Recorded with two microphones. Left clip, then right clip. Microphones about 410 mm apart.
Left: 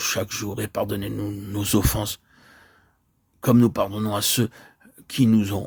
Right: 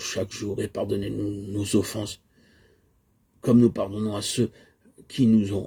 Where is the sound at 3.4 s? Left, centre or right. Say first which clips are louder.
Left 1 dB; left.